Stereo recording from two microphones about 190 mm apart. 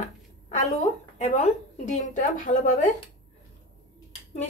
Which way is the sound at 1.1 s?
35° left (ahead or behind).